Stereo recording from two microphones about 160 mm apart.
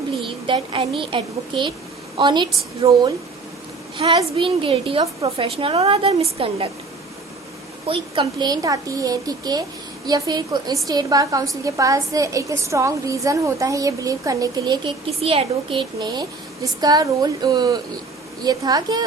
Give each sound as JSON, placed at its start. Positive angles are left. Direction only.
{"t": 0.2, "sound": "a woman's voice", "side_deg": -30}
{"t": 7.9, "sound": "a woman's voice", "side_deg": -35}